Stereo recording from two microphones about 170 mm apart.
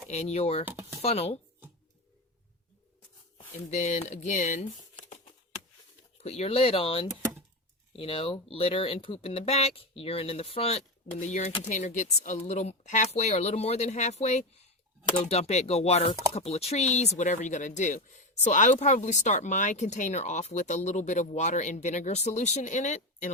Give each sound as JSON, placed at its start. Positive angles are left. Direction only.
{"t": 0.1, "sound": "speech", "side_deg": 40}
{"t": 0.6, "sound": "speech", "side_deg": -10}
{"t": 1.0, "sound": "speech", "side_deg": 35}
{"t": 3.7, "sound": "speech", "side_deg": 40}
{"t": 6.2, "sound": "speech", "side_deg": 35}